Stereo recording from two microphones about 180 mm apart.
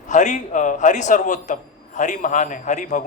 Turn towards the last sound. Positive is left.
turn(degrees=45)  # may be behind; listen again after turning